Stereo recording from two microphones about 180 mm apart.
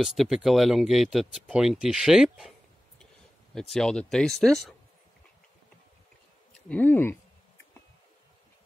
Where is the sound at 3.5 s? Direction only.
5° left (ahead or behind).